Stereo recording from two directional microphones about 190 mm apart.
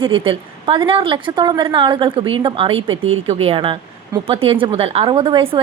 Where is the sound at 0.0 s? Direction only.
25° right (ahead or behind).